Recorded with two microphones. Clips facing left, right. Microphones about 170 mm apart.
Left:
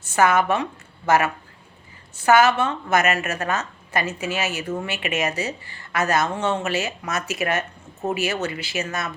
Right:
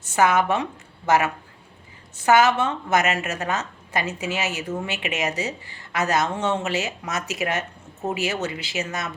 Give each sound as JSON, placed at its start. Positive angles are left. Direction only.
{"t": 0.0, "sound": "a woman's voice", "side_deg": -20}